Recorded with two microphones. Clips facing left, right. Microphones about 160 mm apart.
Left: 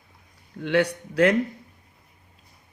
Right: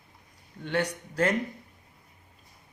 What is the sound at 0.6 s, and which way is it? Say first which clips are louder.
Speech: left 7 dB; 75° left (ahead or behind).